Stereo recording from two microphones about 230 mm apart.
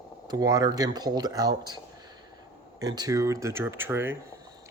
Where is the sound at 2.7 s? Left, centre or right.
Centre.